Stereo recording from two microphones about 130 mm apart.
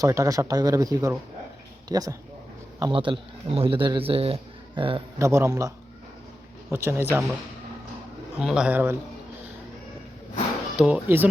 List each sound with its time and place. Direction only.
0.0 s speech: 25° right (ahead or behind)
2.9 s speech: 40° right (ahead or behind)
5.2 s speech: 20° right (ahead or behind)
8.4 s a man's voice: 5° right (ahead or behind)
10.8 s a man's voice: 10° right (ahead or behind)